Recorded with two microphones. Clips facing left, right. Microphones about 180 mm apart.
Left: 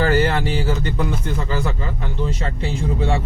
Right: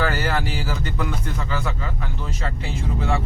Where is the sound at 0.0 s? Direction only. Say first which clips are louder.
Left 5 dB; 30° left (ahead or behind).